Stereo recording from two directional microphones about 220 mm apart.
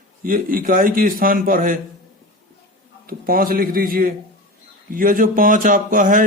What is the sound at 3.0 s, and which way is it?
Speech, 40° right (ahead or behind).